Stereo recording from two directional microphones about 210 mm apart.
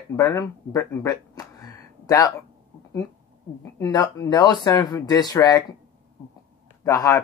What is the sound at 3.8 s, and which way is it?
Speech, 20° left (ahead or behind).